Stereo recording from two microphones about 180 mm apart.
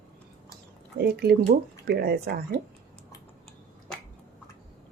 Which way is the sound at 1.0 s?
65° right (ahead or behind).